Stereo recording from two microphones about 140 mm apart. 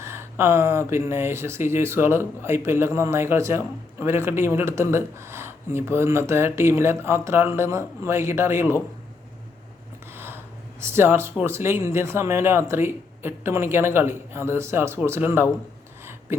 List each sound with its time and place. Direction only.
0.0 s speech: 20° right (ahead or behind)
10.1 s speech: 15° right (ahead or behind)